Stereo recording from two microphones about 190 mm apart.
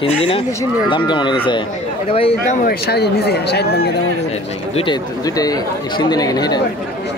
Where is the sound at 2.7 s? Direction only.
60° left (ahead or behind).